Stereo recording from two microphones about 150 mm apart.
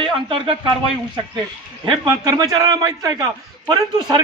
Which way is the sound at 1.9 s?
25° right (ahead or behind).